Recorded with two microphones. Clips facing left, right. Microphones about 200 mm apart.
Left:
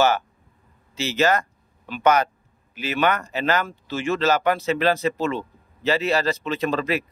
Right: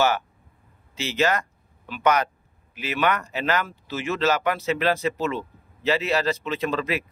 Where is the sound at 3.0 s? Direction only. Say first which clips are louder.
Left 2 dB; 35° left (ahead or behind).